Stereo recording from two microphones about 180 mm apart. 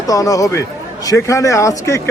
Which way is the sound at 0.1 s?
20° left (ahead or behind).